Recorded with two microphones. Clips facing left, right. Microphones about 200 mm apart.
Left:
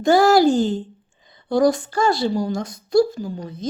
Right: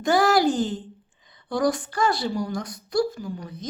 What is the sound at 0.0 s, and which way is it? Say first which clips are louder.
A woman's voice: left 5 dB; 25° left (ahead or behind).